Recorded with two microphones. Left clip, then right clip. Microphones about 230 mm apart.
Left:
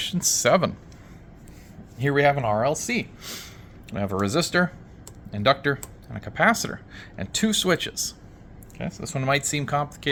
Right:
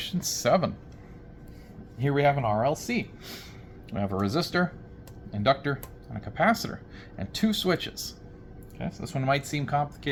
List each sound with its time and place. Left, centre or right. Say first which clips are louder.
0.0 s speech: left 6 dB; left
2.0 s speech: left 4 dB; left